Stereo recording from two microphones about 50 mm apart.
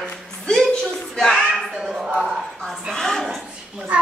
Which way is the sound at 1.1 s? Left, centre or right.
Centre.